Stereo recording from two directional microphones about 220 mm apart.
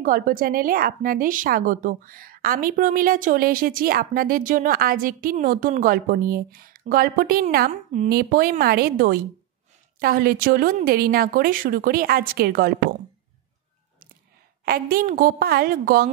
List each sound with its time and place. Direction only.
0.0 s a woman's voice: 40° right (ahead or behind)
14.6 s a woman's voice: 45° right (ahead or behind)